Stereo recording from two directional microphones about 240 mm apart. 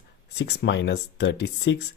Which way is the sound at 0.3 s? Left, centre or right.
Left.